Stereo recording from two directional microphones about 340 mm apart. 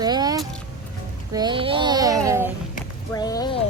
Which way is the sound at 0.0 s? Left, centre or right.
Centre.